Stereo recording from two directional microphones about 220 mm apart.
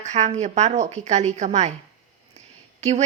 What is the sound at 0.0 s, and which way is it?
A woman's voice, 30° right (ahead or behind).